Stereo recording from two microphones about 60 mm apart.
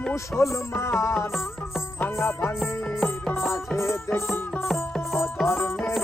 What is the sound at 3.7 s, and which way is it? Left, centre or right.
Music, left.